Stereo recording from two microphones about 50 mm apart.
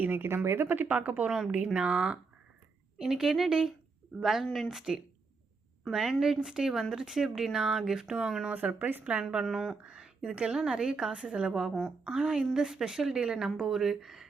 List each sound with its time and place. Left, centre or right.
0.0 s speech: right
0.9 s a woman's voice: right
1.7 s a woman's voice: centre
8.5 s speech: right
9.3 s a woman's voice: centre
9.8 s a sound: centre
10.3 s a woman's voice: centre
11.5 s a woman's voice: centre